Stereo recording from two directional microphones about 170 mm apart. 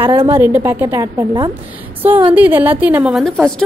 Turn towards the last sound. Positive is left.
turn(degrees=0)  # may be behind; listen again after turning